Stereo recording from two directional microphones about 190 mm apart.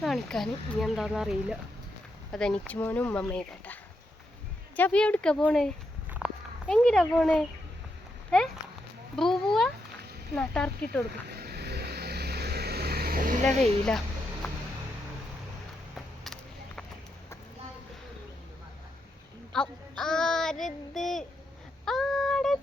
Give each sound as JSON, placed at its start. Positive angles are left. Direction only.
{"t": 0.0, "sound": "speech", "side_deg": 0}
{"t": 4.8, "sound": "speech", "side_deg": 5}
{"t": 6.1, "sound": "walk", "side_deg": -5}
{"t": 6.7, "sound": "speech", "side_deg": 5}
{"t": 9.1, "sound": "a sound", "side_deg": 0}
{"t": 10.3, "sound": "speech", "side_deg": 5}
{"t": 11.3, "sound": "vehicle", "side_deg": -55}
{"t": 16.2, "sound": "vehicle", "side_deg": 0}
{"t": 19.5, "sound": "child singing", "side_deg": 5}
{"t": 21.8, "sound": "female singing", "side_deg": 0}